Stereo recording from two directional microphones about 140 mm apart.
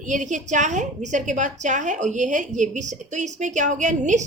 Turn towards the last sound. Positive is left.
turn(degrees=-60)  # may be behind; listen again after turning